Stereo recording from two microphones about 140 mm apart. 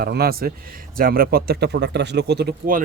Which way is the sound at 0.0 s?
90° right.